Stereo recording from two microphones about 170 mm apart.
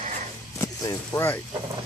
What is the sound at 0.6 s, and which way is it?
Speech, 20° left (ahead or behind).